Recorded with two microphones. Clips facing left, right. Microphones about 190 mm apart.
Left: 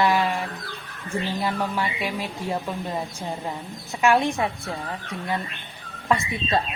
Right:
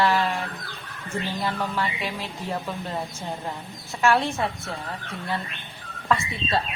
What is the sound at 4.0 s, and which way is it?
Speech, 15° left (ahead or behind).